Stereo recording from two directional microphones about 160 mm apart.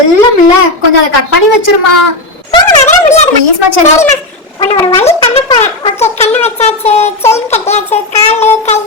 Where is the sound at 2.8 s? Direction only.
45° left (ahead or behind).